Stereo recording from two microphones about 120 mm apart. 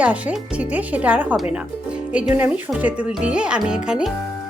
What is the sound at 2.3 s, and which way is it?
Speech, 15° right (ahead or behind).